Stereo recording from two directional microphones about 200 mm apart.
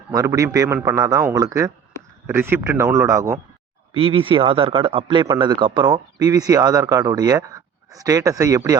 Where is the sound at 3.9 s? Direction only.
25° right (ahead or behind).